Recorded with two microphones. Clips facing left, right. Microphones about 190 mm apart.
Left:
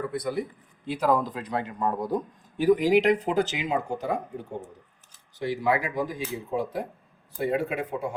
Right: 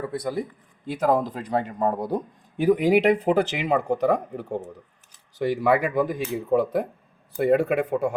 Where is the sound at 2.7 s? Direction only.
55° right (ahead or behind).